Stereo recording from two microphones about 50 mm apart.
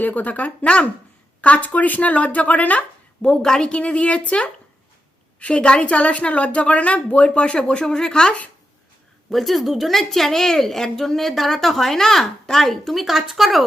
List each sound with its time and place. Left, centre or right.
0.0 s speech: left
3.2 s a woman's voice: centre
9.3 s speech: centre